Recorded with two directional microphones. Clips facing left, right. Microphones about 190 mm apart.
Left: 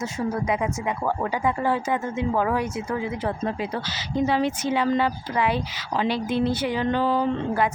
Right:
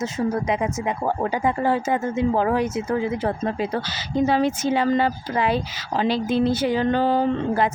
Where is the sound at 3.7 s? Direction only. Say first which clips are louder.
Right 3 dB; 40° right (ahead or behind).